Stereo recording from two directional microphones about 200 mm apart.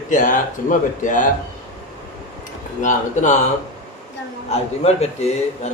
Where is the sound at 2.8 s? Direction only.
40° left (ahead or behind).